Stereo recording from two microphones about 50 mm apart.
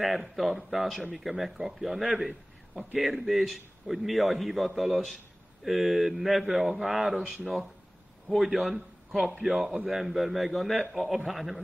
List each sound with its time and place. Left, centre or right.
0.0 s a man's voice: centre
2.1 s a sound: centre
3.0 s a man's voice: centre